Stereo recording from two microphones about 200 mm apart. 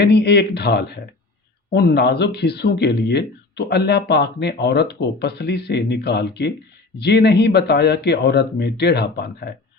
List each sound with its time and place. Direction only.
0.0 s speech: 55° left (ahead or behind)